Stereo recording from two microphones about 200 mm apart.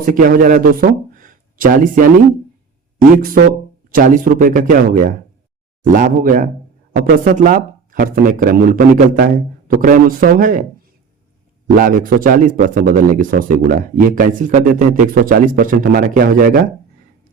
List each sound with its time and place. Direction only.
0.0 s a man's voice: 45° right (ahead or behind)
3.9 s a man's voice: 40° right (ahead or behind)
11.8 s a man's voice: 45° right (ahead or behind)